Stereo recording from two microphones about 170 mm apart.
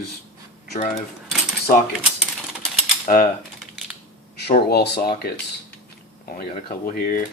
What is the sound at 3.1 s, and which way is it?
Speech, 45° left (ahead or behind).